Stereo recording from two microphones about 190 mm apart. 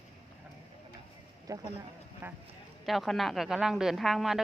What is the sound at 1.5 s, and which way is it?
Speech, 20° right (ahead or behind).